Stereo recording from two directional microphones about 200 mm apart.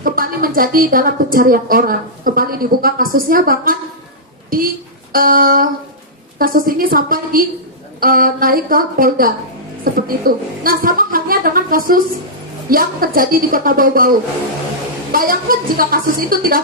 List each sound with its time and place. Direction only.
0.0 s a woman's voice: 45° right (ahead or behind)
15.1 s a woman's voice: 45° right (ahead or behind)